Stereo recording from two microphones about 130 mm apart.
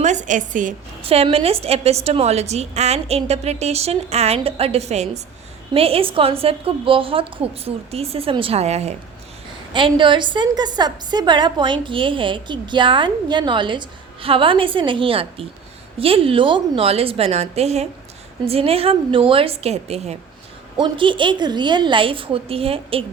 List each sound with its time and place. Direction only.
0.0 s a woman's voice: 65° right (ahead or behind)
1.0 s a woman's voice: 50° right (ahead or behind)
5.7 s a woman's voice: 50° right (ahead or behind)
9.7 s a woman's voice: 40° right (ahead or behind); by 20.1 s 55° right (ahead or behind)
20.8 s a woman's voice: 40° right (ahead or behind)